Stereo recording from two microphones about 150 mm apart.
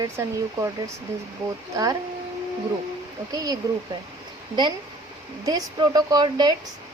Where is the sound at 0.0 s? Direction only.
20° right (ahead or behind).